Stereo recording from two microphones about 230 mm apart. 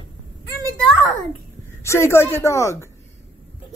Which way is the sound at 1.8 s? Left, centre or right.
Centre.